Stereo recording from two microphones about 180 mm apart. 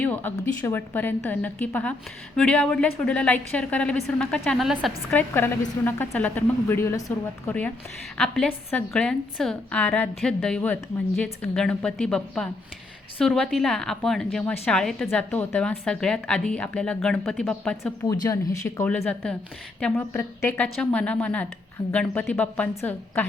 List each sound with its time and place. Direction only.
0.0 s a sound: 10° left (ahead or behind)
0.3 s a woman's voice: 10° left (ahead or behind)
5.1 s a woman's voice: 10° left (ahead or behind)
18.0 s speech: 20° left (ahead or behind)
18.9 s a woman's voice: 5° left (ahead or behind)